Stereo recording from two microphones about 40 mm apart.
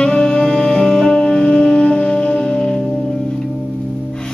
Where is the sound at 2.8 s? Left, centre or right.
Centre.